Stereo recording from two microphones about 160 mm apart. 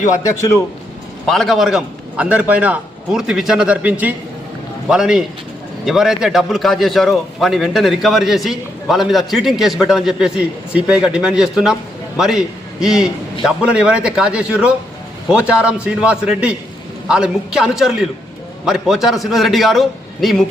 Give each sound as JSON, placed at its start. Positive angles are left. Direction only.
{"t": 0.2, "sound": "a man's voice", "side_deg": 20}
{"t": 1.3, "sound": "a man's voice", "side_deg": 0}